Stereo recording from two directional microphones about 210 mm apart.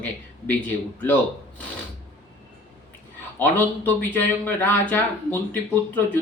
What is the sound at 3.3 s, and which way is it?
Speech, 10° left (ahead or behind).